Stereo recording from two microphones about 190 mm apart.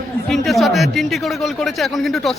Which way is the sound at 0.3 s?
Centre (ahead or behind).